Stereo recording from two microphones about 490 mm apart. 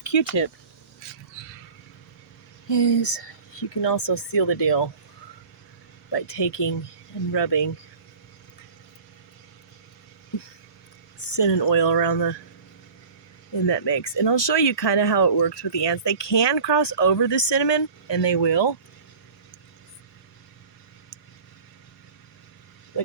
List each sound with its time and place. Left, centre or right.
0.1 s speech: left
2.7 s speech: left
6.1 s speech: left
11.3 s speech: left
13.7 s speech: left